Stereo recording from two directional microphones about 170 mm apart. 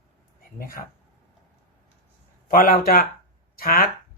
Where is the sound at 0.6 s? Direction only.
55° left (ahead or behind).